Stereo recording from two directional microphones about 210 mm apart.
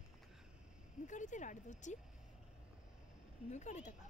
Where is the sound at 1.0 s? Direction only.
35° left (ahead or behind).